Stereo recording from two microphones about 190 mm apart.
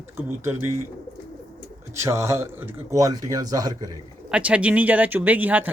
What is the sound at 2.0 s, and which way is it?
Speech, 15° right (ahead or behind).